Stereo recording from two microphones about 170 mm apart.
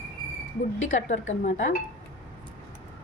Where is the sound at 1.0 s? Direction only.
45° left (ahead or behind).